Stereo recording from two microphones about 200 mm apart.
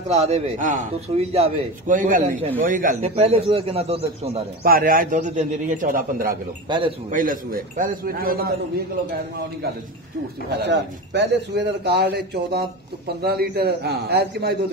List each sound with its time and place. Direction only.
0.1 s a man's voice: 35° right (ahead or behind)
4.6 s a man's voice: 45° right (ahead or behind)
6.7 s a man's voice: 25° right (ahead or behind)
7.1 s a man's voice: 45° right (ahead or behind)
10.6 s a man's voice: 60° right (ahead or behind)